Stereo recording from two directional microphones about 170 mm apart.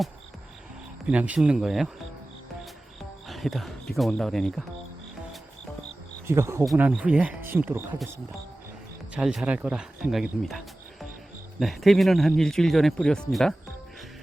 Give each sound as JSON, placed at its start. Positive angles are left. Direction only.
{"t": 1.0, "sound": "speech", "side_deg": -5}
{"t": 3.2, "sound": "speech", "side_deg": 0}
{"t": 6.2, "sound": "speech", "side_deg": -15}
{"t": 9.1, "sound": "speech", "side_deg": -5}
{"t": 11.6, "sound": "speech", "side_deg": 0}